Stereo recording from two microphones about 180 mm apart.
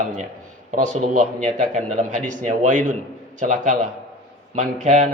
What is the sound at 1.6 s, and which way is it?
A man's voice, 45° right (ahead or behind).